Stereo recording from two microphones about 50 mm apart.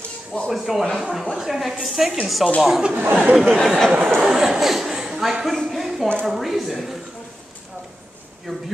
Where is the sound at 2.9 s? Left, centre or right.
Right.